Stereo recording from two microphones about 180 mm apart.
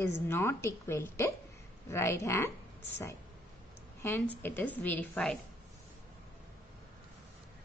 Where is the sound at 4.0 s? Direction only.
10° left (ahead or behind).